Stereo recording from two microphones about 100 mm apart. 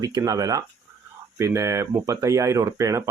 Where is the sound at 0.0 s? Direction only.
35° right (ahead or behind).